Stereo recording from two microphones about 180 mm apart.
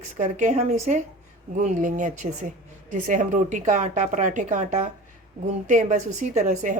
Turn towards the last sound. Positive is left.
turn(degrees=-40)  # may be behind; listen again after turning